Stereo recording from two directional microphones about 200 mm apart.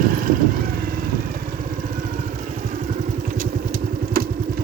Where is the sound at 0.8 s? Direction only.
45° right (ahead or behind).